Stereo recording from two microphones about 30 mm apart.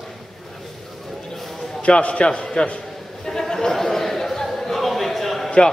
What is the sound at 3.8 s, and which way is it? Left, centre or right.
Chatter, centre.